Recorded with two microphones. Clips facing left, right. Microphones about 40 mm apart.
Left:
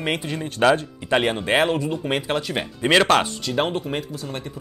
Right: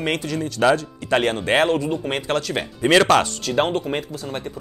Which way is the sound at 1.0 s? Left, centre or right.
Centre.